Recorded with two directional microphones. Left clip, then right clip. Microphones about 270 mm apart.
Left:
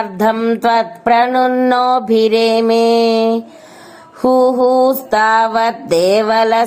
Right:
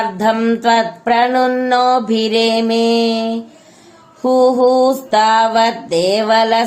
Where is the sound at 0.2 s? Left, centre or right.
Left.